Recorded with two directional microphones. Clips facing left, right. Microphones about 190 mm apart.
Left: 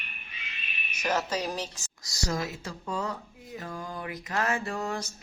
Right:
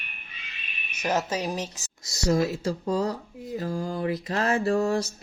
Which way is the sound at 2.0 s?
25° right (ahead or behind).